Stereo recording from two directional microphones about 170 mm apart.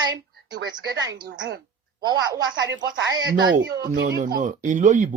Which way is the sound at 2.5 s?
90° right.